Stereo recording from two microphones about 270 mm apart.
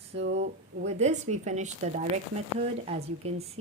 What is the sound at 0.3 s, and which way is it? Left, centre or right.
Speech, right.